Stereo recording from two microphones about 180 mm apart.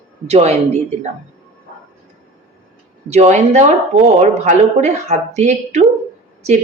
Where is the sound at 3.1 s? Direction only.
40° right (ahead or behind).